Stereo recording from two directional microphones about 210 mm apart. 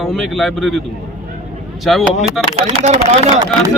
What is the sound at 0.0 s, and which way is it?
Speech, centre (ahead or behind).